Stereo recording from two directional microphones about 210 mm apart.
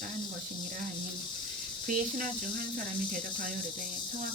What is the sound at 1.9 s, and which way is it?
Speech, 40° right (ahead or behind).